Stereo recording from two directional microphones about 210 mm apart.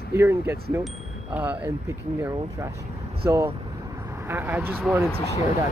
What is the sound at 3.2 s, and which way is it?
Speech, 10° right (ahead or behind).